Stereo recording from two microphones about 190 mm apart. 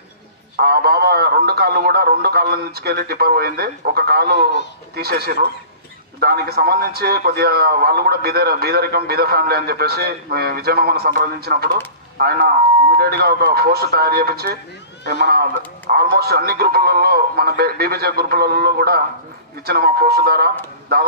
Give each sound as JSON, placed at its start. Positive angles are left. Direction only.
{"t": 0.6, "sound": "a man's voice", "side_deg": -55}